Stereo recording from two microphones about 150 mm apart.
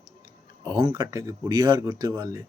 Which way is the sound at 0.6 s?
30° right (ahead or behind).